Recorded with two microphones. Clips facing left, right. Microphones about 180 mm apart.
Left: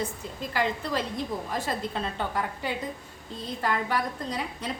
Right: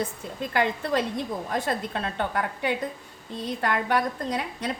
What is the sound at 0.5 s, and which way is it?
A woman's voice, 60° right (ahead or behind).